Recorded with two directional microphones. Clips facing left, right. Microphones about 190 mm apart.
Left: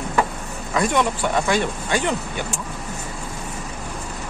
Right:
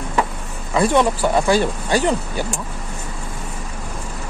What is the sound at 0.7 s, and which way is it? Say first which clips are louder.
Speech: right 4 dB; 30° right (ahead or behind).